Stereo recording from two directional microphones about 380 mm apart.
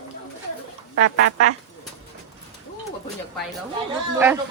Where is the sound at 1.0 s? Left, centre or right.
Right.